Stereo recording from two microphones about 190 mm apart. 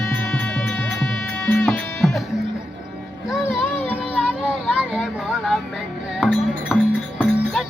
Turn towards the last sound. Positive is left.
turn(degrees=0)  # may be behind; listen again after turning